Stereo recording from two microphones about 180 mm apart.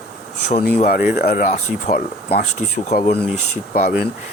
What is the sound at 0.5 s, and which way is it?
Speech, 40° left (ahead or behind).